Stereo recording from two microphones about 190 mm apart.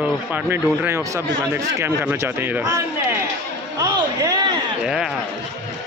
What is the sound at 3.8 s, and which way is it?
Speech, 20° right (ahead or behind).